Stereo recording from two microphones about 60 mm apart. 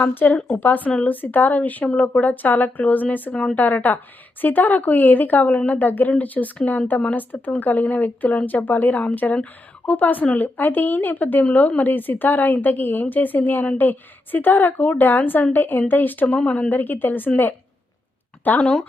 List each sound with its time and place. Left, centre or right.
0.0 s a woman's voice: left
0.3 s a woman's voice: centre
0.6 s a woman's voice: left
0.9 s speech: centre
1.1 s speech: left
3.3 s speech: centre
3.6 s a woman's voice: left
18.6 s speech: centre